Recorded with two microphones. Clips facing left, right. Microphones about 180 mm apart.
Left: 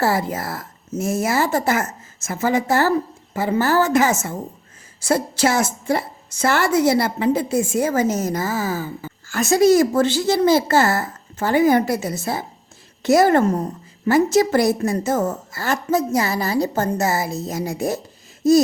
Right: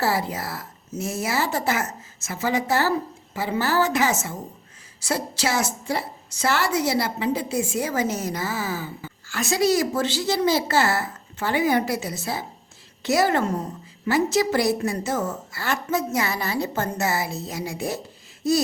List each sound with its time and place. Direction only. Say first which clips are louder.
0.0 s a woman's voice: left 4 dB; 50° left (ahead or behind)